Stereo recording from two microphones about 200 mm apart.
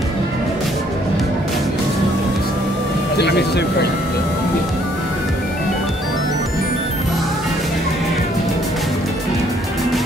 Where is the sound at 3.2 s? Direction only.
55° left (ahead or behind).